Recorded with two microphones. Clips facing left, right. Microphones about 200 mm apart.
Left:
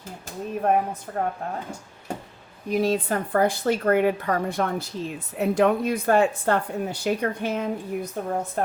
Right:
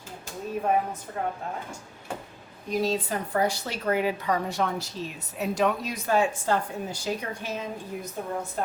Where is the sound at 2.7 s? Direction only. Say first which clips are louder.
Left 4 dB; 55° left (ahead or behind).